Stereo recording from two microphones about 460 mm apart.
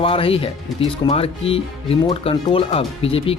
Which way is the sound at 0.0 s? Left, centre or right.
Centre.